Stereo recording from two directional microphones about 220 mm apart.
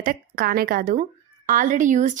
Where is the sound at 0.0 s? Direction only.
40° right (ahead or behind).